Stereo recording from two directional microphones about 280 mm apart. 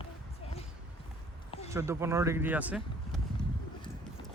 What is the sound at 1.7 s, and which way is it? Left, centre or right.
Speech, centre.